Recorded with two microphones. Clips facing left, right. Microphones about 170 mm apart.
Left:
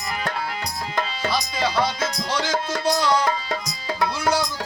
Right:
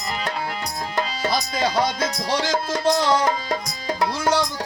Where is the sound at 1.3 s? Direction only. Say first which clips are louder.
Right 1 dB; 45° right (ahead or behind).